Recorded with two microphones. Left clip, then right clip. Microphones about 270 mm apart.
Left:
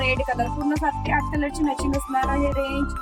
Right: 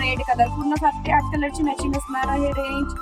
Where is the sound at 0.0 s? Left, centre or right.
Centre.